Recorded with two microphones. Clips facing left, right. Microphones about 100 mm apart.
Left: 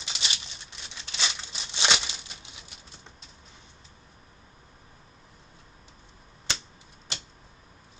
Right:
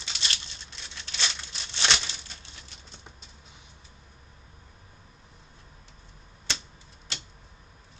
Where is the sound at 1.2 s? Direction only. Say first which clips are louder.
Left 1 dB; 15° left (ahead or behind).